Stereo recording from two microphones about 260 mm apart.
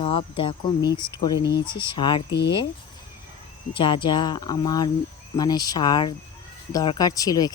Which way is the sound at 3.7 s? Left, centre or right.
Centre.